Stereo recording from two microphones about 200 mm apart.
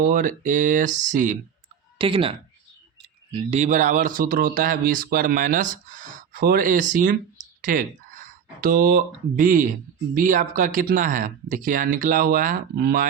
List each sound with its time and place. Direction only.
0.0 s speech: 40° right (ahead or behind)
2.0 s speech: 25° right (ahead or behind)
3.3 s speech: 35° right (ahead or behind)